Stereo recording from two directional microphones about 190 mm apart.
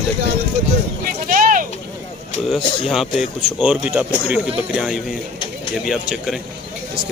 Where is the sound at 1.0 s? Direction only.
45° right (ahead or behind).